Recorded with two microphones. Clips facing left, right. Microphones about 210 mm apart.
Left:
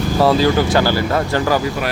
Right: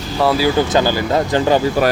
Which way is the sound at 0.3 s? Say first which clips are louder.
Even; 15° right (ahead or behind).